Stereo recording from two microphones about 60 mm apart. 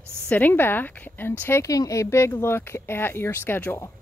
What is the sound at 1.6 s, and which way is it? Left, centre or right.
Speech, left.